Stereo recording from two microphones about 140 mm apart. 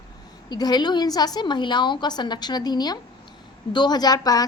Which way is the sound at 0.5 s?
30° left (ahead or behind).